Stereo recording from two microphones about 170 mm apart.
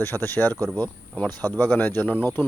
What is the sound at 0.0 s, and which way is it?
Speech, 10° left (ahead or behind).